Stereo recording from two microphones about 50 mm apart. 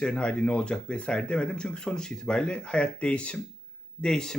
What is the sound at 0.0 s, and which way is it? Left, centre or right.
Speech, centre.